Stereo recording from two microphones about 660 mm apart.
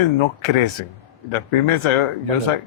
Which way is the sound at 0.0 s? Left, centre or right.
Left.